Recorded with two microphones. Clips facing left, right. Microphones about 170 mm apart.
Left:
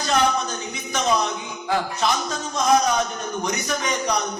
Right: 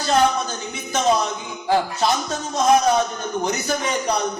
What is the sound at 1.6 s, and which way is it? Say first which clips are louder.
Speech: right 3 dB; 35° right (ahead or behind).